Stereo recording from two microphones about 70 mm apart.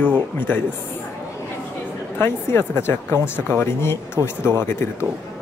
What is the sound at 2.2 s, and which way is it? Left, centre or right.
Speech, left.